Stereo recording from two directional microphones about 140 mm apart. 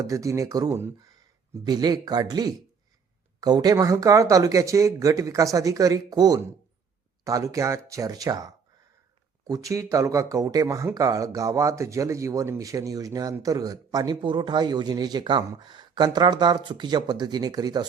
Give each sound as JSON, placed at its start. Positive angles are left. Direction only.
{"t": 0.0, "sound": "speech", "side_deg": -20}
{"t": 1.6, "sound": "speech", "side_deg": -30}